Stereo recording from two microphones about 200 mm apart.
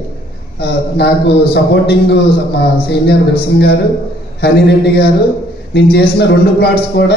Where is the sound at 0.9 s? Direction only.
55° left (ahead or behind).